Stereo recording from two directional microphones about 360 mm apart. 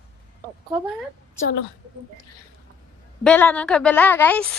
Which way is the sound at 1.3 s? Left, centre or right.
Left.